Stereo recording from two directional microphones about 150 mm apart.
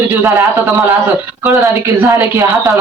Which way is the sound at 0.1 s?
15° right (ahead or behind).